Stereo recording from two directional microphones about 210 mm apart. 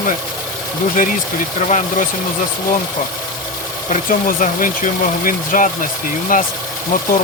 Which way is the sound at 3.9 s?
40° left (ahead or behind).